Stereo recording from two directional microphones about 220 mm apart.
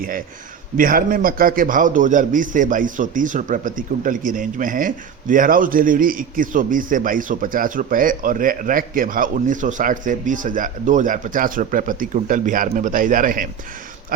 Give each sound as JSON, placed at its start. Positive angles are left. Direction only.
{"t": 0.8, "sound": "a man's voice", "side_deg": -40}